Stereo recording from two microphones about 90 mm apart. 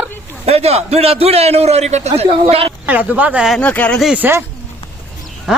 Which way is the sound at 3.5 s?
15° left (ahead or behind).